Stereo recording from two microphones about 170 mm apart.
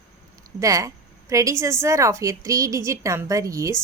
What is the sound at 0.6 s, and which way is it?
A woman's voice, 20° right (ahead or behind).